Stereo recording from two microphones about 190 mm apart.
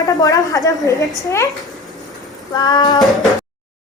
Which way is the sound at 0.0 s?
20° left (ahead or behind).